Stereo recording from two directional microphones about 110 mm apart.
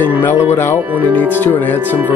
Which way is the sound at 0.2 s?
20° left (ahead or behind).